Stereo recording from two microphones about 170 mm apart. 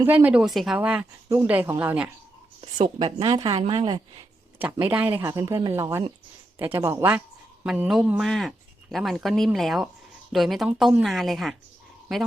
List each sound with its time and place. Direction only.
0.0 s speech: 10° right (ahead or behind)
2.6 s a woman's voice: 30° right (ahead or behind)
3.5 s a woman's voice: 35° right (ahead or behind)
4.6 s speech: 10° right (ahead or behind)